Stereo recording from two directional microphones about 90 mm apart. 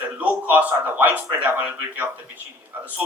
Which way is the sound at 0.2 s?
20° right (ahead or behind).